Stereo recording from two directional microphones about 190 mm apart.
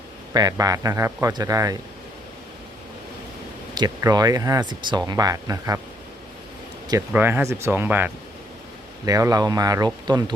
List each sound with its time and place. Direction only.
0.3 s speech: 20° right (ahead or behind)
3.8 s speech: 20° right (ahead or behind)
7.1 s speech: 10° right (ahead or behind)